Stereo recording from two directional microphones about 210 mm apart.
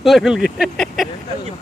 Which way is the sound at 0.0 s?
Centre (ahead or behind).